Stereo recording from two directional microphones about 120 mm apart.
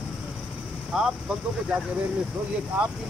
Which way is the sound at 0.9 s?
5° right (ahead or behind).